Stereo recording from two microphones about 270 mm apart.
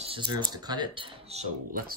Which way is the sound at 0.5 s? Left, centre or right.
Centre.